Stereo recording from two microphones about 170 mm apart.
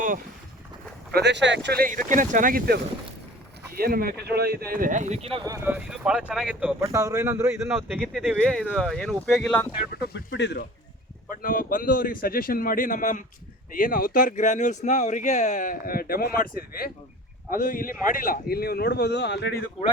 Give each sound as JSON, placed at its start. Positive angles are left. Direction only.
{"t": 1.1, "sound": "speech", "side_deg": -85}
{"t": 5.5, "sound": "speech", "side_deg": -10}
{"t": 6.8, "sound": "speech", "side_deg": -20}
{"t": 7.7, "sound": "speech", "side_deg": -5}
{"t": 9.9, "sound": "speech", "side_deg": 70}
{"t": 11.3, "sound": "speech", "side_deg": 50}